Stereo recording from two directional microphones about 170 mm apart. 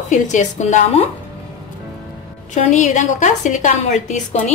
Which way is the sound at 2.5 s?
45° left (ahead or behind).